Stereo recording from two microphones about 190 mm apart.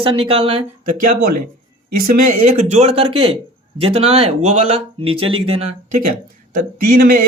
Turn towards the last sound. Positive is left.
turn(degrees=-50)  # may be behind; listen again after turning